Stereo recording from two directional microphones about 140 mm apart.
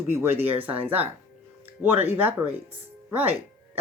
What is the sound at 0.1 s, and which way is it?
Speech, 15° right (ahead or behind).